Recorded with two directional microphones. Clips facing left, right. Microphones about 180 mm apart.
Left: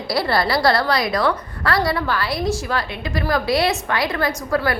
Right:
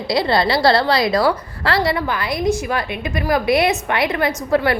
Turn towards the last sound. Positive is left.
turn(degrees=-25)  # may be behind; listen again after turning